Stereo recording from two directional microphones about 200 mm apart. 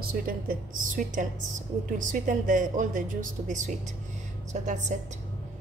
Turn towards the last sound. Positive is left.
turn(degrees=-35)  # may be behind; listen again after turning